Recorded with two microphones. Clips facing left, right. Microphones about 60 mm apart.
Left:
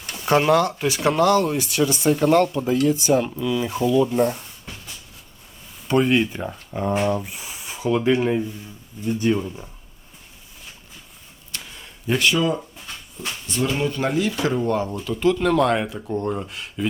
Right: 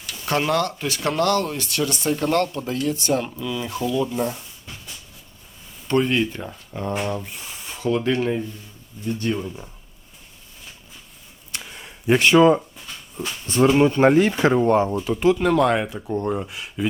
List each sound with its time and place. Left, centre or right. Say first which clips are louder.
0.3 s speech: left 4 dB; centre
5.9 s speech: left 2 dB; centre
11.5 s a sound: right 2 dB; centre
12.0 s speech: right 6 dB; right; by 16.8 s centre